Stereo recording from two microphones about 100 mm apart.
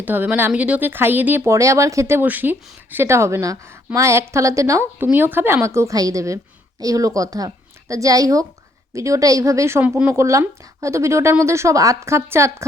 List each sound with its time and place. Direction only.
0.0 s speech: 15° right (ahead or behind)
1.5 s a woman's voice: 30° right (ahead or behind)
5.1 s a woman's voice: 20° right (ahead or behind)